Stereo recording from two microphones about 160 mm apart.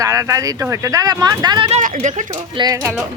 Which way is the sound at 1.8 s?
50° right (ahead or behind).